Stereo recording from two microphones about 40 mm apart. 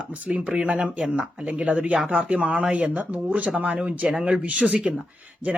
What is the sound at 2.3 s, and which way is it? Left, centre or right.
Speech, right.